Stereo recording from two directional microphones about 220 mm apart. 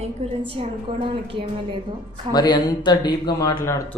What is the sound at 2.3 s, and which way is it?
Speech, 20° left (ahead or behind).